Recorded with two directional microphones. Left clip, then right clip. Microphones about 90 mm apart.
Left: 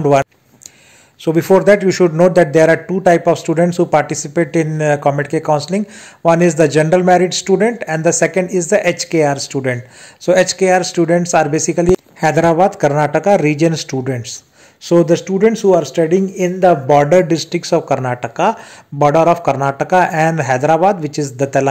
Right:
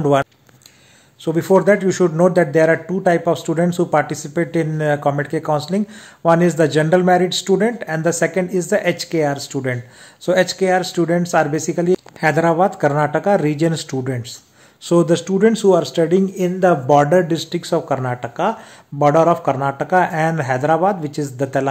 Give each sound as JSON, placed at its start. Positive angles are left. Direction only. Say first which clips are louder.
{"t": 0.0, "sound": "speech", "louder": "left 4 dB", "side_deg": 15}
{"t": 1.2, "sound": "speech", "louder": "left 4 dB", "side_deg": 30}
{"t": 2.4, "sound": "a man's voice", "louder": "left 4 dB", "side_deg": 35}
{"t": 12.2, "sound": "a man's voice", "louder": "left 1 dB", "side_deg": 45}
{"t": 12.5, "sound": "speech", "louder": "left 4 dB", "side_deg": 25}
{"t": 14.0, "sound": "a man's voice", "louder": "left 4 dB", "side_deg": 30}
{"t": 14.9, "sound": "speech", "louder": "left 3 dB", "side_deg": 5}
{"t": 17.0, "sound": "speech", "louder": "left 4 dB", "side_deg": 20}